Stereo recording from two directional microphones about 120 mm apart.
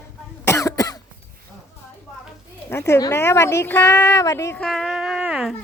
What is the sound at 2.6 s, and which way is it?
Speech, 20° left (ahead or behind).